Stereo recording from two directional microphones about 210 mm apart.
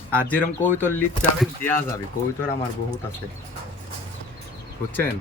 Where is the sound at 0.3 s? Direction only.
10° left (ahead or behind).